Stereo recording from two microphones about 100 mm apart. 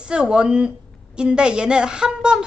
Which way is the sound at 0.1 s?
10° right (ahead or behind).